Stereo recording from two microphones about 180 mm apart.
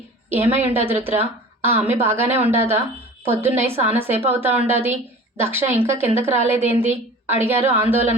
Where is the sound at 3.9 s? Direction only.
10° right (ahead or behind).